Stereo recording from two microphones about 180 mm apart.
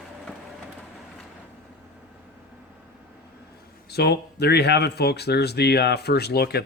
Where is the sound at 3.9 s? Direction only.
65° left (ahead or behind).